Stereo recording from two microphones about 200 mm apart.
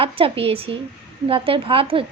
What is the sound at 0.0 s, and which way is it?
A woman's voice, 30° right (ahead or behind).